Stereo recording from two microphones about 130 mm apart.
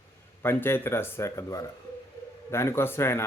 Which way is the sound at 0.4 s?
20° left (ahead or behind).